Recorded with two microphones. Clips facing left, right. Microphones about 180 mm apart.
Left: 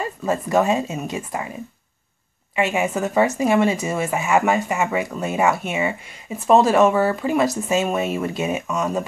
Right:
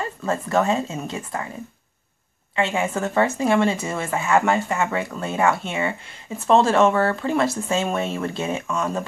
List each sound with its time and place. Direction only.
0.0 s a woman's voice: 15° left (ahead or behind)
2.5 s a woman's voice: 15° left (ahead or behind)